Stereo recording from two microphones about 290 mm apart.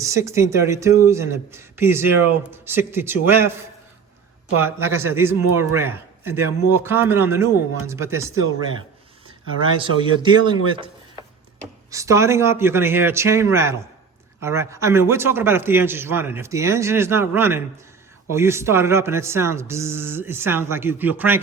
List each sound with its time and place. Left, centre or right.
0.0 s speech: centre
4.5 s speech: centre
9.7 s speech: centre
11.9 s speech: centre